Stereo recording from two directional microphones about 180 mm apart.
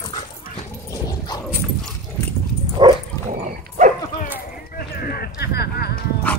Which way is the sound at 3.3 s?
45° right (ahead or behind).